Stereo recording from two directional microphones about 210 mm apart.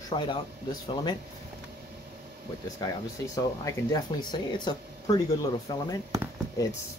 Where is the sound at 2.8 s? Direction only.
15° left (ahead or behind).